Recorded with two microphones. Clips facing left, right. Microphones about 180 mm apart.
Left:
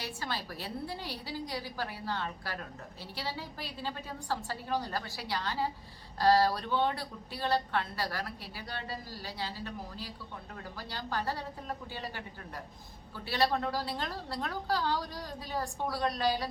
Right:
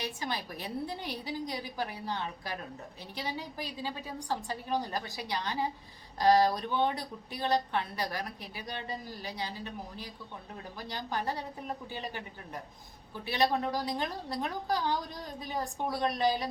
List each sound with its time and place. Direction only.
0.0 s a woman's voice: 15° right (ahead or behind)